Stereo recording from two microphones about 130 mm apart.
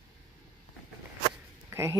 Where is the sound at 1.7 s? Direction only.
20° right (ahead or behind).